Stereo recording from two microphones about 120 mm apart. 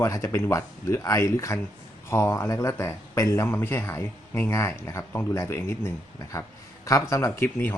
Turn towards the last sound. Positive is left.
turn(degrees=20)  # may be behind; listen again after turning